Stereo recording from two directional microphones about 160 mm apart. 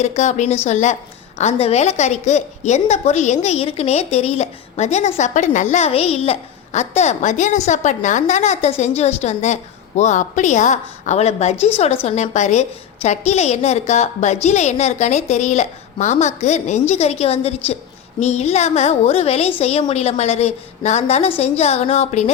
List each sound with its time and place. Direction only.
0.0 s a woman's voice: 45° left (ahead or behind)